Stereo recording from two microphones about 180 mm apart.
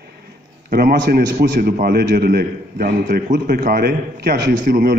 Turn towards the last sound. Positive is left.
turn(degrees=-55)  # may be behind; listen again after turning